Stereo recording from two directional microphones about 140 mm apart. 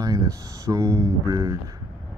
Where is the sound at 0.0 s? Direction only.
25° right (ahead or behind).